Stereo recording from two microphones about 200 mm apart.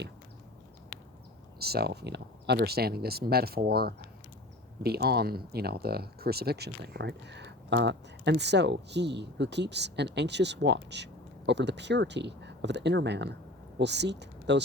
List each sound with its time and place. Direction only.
1.5 s speech: 50° right (ahead or behind)